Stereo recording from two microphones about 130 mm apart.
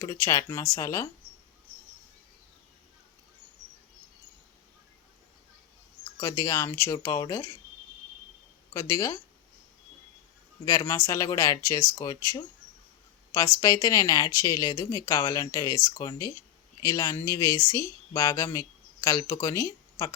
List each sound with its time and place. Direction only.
0.0 s speech: 25° left (ahead or behind)
6.1 s speech: 25° left (ahead or behind)
8.7 s speech: 25° left (ahead or behind)
10.7 s speech: 25° left (ahead or behind)
13.6 s speech: 25° left (ahead or behind)